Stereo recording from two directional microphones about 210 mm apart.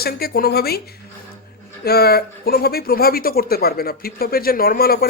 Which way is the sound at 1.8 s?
50° left (ahead or behind).